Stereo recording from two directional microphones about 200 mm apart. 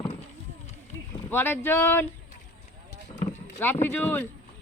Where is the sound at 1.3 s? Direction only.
10° left (ahead or behind).